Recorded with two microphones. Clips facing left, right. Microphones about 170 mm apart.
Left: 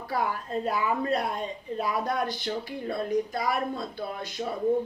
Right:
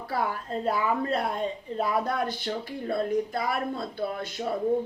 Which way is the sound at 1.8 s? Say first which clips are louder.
Right 2 dB; 55° right (ahead or behind).